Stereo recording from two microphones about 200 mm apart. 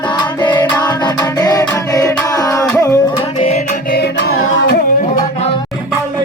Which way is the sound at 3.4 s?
30° left (ahead or behind).